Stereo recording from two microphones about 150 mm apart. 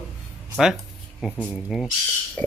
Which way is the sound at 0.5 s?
5° right (ahead or behind).